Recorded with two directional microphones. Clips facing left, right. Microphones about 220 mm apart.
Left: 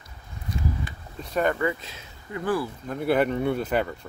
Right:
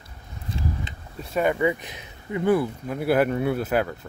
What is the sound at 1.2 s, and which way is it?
Speech, 10° right (ahead or behind).